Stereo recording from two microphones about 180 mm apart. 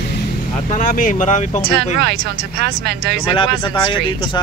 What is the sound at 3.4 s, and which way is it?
Speech, 25° left (ahead or behind).